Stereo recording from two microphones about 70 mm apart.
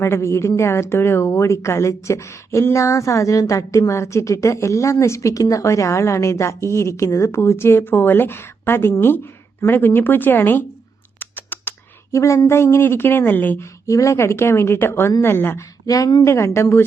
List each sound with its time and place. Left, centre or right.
0.0 s a woman's voice: left
11.2 s a sound: left
12.1 s a woman's voice: left
13.6 s a woman's voice: left
15.9 s speech: left
16.2 s speech: left